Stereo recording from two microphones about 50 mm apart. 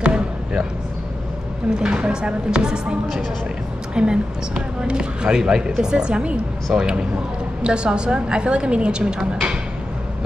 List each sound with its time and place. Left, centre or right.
0.0 s basketball bounce: centre
1.8 s speech: centre